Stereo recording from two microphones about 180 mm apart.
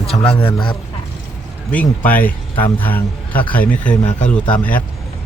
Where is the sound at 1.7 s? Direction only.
10° left (ahead or behind).